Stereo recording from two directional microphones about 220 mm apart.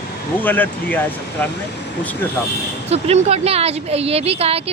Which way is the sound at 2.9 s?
30° right (ahead or behind).